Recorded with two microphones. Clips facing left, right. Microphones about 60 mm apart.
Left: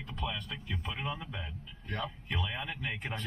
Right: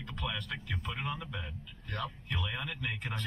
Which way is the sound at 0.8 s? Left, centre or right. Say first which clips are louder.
Even; left.